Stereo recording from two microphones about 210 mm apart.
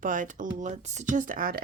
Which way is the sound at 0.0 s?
40° right (ahead or behind).